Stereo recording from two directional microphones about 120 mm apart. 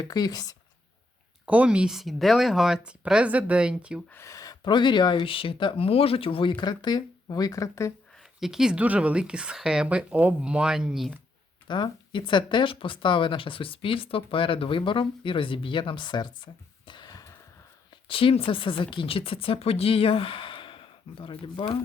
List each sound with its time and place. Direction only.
0.0 s speech: 35° left (ahead or behind)
1.5 s a woman's voice: 10° right (ahead or behind)
4.1 s speech: 25° left (ahead or behind)
8.2 s a woman's voice: 5° right (ahead or behind)
11.7 s speech: 40° left (ahead or behind)
16.8 s a sound: 40° left (ahead or behind)
18.1 s speech: 50° left (ahead or behind)